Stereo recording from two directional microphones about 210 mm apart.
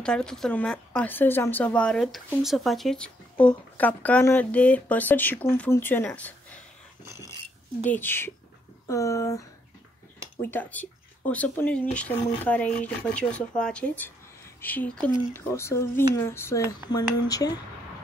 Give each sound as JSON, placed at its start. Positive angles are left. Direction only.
{"t": 0.0, "sound": "a woman's voice", "side_deg": 5}
{"t": 7.8, "sound": "speech", "side_deg": 10}
{"t": 10.4, "sound": "speech", "side_deg": 10}